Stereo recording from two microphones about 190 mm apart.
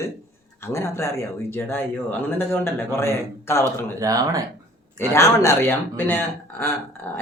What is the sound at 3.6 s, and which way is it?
Speech, 20° right (ahead or behind).